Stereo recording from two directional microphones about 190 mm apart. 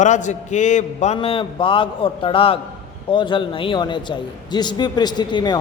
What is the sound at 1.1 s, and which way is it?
A man's voice, 30° left (ahead or behind).